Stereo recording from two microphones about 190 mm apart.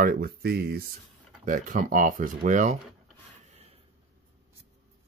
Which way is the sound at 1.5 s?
45° right (ahead or behind).